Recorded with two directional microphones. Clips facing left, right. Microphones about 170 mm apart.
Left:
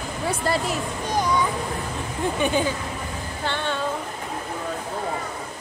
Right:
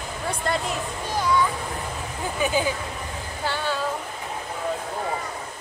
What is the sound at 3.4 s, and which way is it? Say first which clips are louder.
Speech: even; 5° right (ahead or behind).